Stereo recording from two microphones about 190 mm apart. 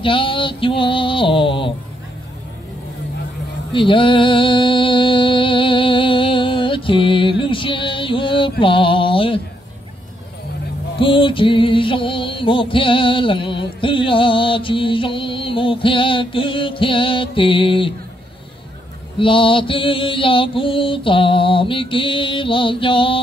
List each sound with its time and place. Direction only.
0.0 s mantra: 25° left (ahead or behind)
3.7 s music: 25° left (ahead or behind)
11.0 s music: 25° left (ahead or behind)
19.1 s mantra: 25° left (ahead or behind)